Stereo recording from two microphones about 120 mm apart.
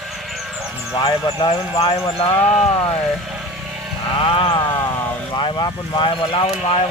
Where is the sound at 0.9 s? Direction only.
40° left (ahead or behind).